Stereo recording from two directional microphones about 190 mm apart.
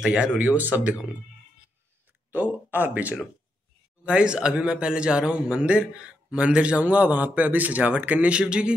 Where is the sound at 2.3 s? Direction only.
10° right (ahead or behind).